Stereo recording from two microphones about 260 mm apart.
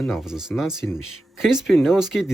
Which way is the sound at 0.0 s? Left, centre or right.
Centre.